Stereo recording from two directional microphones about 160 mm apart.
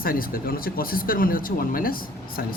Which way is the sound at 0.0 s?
65° left (ahead or behind).